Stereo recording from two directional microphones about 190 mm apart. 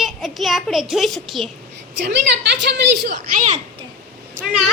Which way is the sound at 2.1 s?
65° right (ahead or behind).